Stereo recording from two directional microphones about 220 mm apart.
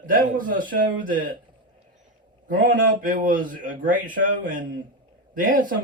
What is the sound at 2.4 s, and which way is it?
Speech, 40° right (ahead or behind).